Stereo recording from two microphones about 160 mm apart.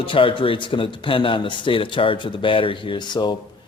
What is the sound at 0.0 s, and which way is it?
Speech, 35° left (ahead or behind).